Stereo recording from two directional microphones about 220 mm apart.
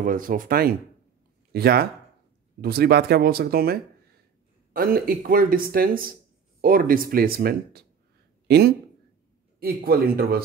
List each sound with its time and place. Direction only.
0.0 s speech: 40° right (ahead or behind)